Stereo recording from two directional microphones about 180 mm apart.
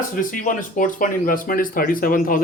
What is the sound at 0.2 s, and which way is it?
Speech, 45° left (ahead or behind).